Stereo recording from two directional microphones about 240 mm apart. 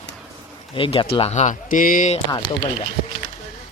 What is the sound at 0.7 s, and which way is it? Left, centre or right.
Speech, left.